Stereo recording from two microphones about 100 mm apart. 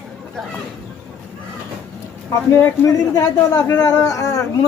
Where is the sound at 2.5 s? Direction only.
30° left (ahead or behind).